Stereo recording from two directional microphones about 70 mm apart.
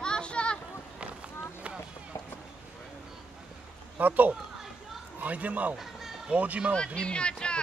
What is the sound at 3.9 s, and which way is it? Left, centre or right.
Speech, right.